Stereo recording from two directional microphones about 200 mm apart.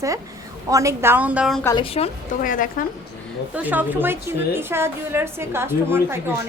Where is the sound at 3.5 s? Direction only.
10° right (ahead or behind).